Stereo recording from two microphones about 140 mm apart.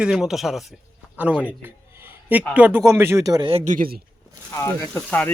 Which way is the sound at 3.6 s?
80° right.